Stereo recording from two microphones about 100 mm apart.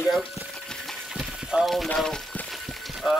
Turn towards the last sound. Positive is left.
turn(degrees=0)  # may be behind; listen again after turning